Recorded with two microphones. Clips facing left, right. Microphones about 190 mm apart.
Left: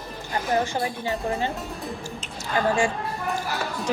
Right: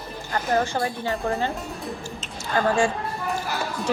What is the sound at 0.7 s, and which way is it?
Speech, 20° left (ahead or behind).